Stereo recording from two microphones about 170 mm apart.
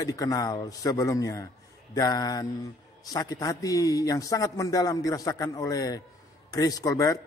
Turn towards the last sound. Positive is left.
turn(degrees=20)  # may be behind; listen again after turning